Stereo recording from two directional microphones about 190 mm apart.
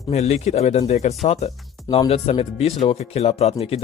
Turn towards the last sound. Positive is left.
turn(degrees=30)  # may be behind; listen again after turning